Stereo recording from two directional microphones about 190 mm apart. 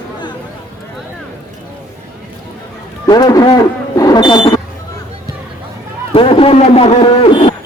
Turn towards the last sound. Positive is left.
turn(degrees=25)  # may be behind; listen again after turning